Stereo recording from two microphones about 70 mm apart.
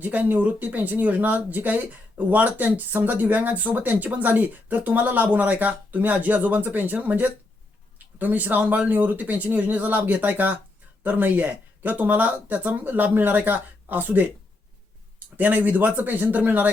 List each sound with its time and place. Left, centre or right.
0.0 s speech: right
15.4 s speech: right